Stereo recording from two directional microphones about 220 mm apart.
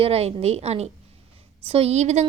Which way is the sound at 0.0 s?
25° right (ahead or behind).